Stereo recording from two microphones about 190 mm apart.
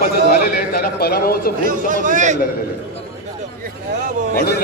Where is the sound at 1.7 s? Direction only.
40° right (ahead or behind).